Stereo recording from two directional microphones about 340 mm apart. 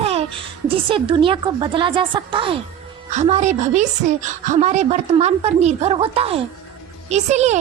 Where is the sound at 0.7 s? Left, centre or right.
Centre.